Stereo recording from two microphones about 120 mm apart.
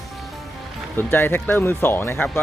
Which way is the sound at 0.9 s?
15° left (ahead or behind).